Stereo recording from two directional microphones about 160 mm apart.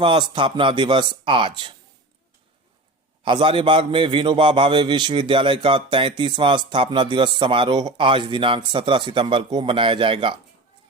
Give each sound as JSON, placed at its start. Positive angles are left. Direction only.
{"t": 0.0, "sound": "a man's voice", "side_deg": -30}
{"t": 3.2, "sound": "a man's voice", "side_deg": -30}